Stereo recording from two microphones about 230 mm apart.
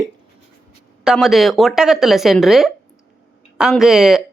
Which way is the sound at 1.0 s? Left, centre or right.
Centre.